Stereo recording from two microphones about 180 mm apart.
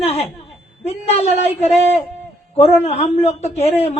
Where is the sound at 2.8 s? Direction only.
35° left (ahead or behind).